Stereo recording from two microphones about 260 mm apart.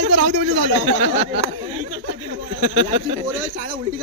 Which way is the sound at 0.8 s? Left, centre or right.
Right.